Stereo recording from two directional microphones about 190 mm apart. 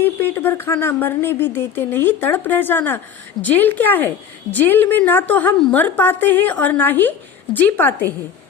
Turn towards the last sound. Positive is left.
turn(degrees=10)  # may be behind; listen again after turning